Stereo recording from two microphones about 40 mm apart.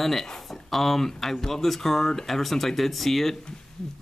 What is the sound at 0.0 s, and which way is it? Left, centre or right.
Speech, centre.